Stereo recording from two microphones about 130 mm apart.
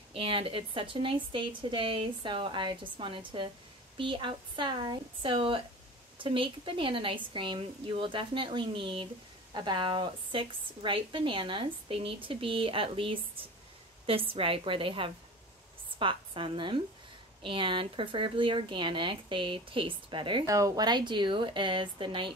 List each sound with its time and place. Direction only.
0.1 s a woman's voice: 45° right (ahead or behind)
20.4 s a woman's voice: 25° right (ahead or behind)